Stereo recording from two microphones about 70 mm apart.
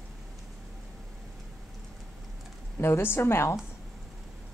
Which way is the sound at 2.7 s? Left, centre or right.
Left.